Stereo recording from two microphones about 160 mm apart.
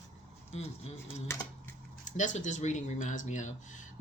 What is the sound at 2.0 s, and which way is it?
Speech, 50° left (ahead or behind).